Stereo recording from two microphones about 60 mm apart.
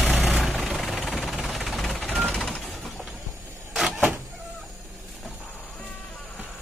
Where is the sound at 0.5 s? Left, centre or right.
Centre.